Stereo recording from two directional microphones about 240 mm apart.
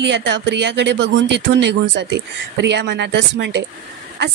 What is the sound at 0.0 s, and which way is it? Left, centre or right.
Speech, right.